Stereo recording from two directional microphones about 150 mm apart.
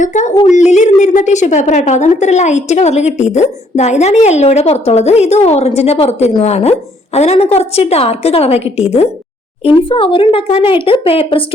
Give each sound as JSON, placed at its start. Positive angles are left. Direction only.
{"t": 0.0, "sound": "a woman's voice", "side_deg": 55}